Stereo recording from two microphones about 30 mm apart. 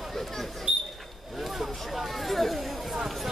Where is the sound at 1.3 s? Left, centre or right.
Centre.